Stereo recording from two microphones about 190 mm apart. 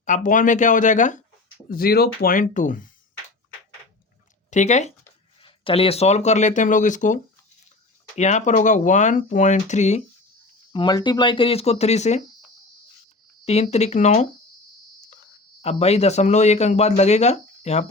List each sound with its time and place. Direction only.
0.0 s speech: 40° left (ahead or behind)
1.7 s speech: 55° left (ahead or behind)
4.5 s speech: 40° left (ahead or behind)
5.4 s speech: 25° left (ahead or behind)
10.7 s speech: 25° left (ahead or behind)
13.4 s speech: 35° left (ahead or behind)
15.6 s speech: 35° left (ahead or behind)